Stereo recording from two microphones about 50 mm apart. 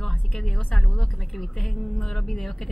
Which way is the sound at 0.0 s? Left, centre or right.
Centre.